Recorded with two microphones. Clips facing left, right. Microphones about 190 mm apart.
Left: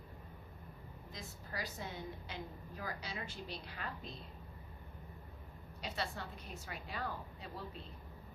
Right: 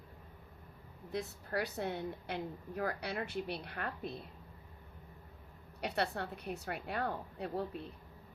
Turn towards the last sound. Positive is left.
turn(degrees=-60)  # may be behind; listen again after turning